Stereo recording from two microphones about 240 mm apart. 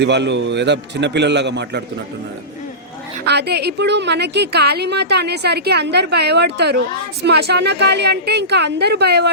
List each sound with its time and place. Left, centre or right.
0.0 s a woman's voice: right
3.2 s a woman's voice: right